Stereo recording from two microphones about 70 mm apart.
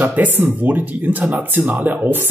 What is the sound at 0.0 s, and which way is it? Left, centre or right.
Speech, right.